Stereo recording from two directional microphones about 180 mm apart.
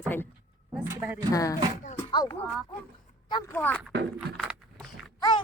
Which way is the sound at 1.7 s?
40° left (ahead or behind).